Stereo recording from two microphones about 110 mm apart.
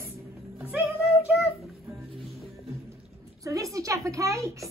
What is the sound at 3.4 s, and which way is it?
A woman's voice, 30° right (ahead or behind).